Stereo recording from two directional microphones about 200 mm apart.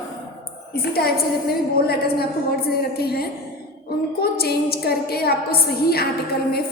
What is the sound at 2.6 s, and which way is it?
A woman's voice, 50° left (ahead or behind).